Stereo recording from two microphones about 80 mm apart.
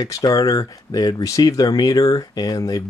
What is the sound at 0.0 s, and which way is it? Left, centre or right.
Speech, left.